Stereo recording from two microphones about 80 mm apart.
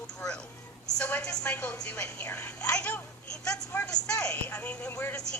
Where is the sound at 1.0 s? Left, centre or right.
Centre.